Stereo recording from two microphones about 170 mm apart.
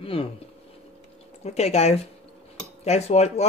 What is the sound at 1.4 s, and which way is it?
Speech, 40° left (ahead or behind).